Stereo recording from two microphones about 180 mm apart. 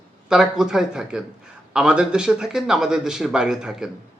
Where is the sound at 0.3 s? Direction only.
5° right (ahead or behind).